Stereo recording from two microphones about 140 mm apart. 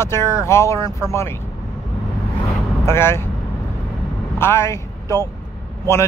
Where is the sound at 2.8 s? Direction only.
20° left (ahead or behind).